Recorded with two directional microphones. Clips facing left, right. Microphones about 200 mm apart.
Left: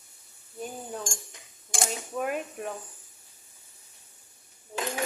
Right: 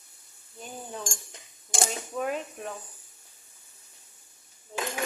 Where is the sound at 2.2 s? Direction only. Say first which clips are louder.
Even; 10° left (ahead or behind).